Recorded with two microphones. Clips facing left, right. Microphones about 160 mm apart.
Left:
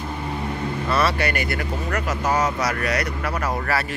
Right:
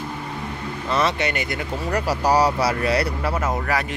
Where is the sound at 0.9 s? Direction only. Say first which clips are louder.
Right 1 dB; 20° right (ahead or behind).